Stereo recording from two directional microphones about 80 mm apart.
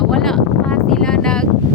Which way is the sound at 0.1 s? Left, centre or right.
Centre.